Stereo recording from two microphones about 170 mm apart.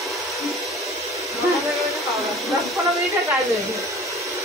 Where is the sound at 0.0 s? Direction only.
Centre (ahead or behind).